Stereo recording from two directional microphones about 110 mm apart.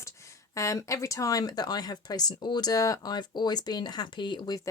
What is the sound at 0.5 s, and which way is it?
Speech, 30° left (ahead or behind).